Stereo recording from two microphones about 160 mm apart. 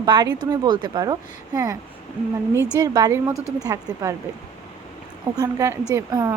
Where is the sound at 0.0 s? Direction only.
25° right (ahead or behind).